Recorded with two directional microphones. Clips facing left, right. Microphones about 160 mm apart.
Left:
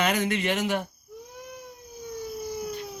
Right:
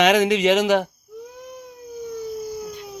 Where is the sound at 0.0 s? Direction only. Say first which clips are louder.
Right 9 dB; 90° right.